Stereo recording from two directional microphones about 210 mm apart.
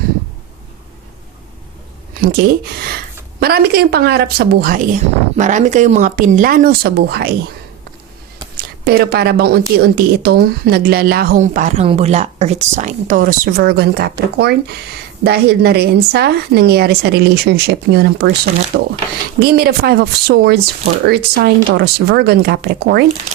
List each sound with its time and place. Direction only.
2.1 s a woman's voice: 45° right (ahead or behind)
8.5 s a woman's voice: 50° right (ahead or behind)